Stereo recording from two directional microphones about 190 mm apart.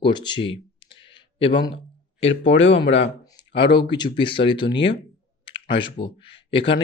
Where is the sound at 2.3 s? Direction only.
85° left.